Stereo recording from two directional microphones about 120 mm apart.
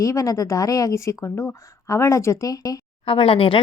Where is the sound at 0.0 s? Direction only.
25° left (ahead or behind).